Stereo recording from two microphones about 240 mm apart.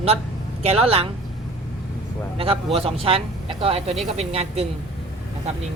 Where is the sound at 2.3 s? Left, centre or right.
Right.